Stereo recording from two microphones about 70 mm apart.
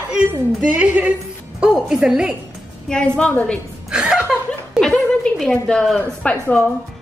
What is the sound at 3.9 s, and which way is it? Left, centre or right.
Chuckle, centre.